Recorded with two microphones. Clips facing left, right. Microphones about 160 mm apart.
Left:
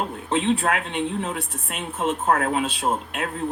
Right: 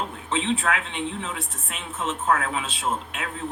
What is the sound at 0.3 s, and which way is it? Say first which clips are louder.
Speech: left 5 dB; 55° left (ahead or behind).